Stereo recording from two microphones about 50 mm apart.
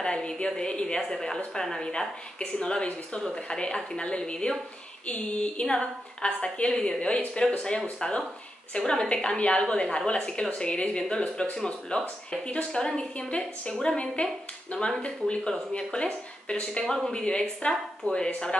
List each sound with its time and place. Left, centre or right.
0.0 s a woman's voice: centre
16.8 s a woman's voice: centre
17.1 s a woman's voice: centre